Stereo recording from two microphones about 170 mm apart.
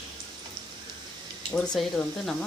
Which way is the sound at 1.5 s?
Centre (ahead or behind).